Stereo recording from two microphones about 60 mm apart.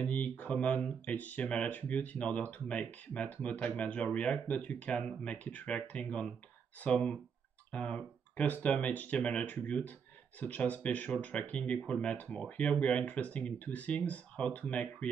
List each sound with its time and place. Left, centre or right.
0.0 s speech: left